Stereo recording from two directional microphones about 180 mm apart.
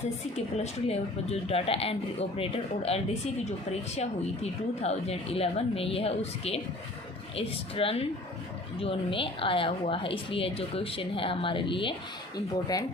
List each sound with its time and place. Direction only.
0.3 s speech: 35° left (ahead or behind)
4.8 s a woman's voice: 35° left (ahead or behind)